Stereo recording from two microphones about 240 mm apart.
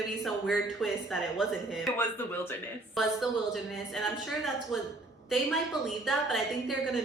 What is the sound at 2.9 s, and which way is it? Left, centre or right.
A man's voice, centre.